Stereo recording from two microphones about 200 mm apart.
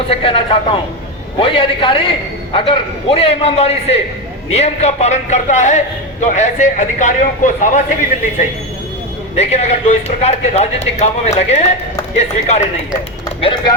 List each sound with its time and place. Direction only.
0.1 s a man's voice: 25° left (ahead or behind)
9.3 s a man's voice: 35° left (ahead or behind)